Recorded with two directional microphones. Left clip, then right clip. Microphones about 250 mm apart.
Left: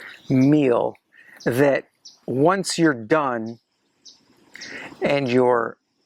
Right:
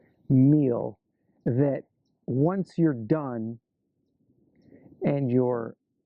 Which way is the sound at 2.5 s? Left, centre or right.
Centre.